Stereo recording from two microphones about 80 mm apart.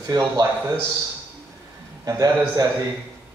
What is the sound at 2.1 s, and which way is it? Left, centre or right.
Speech, right.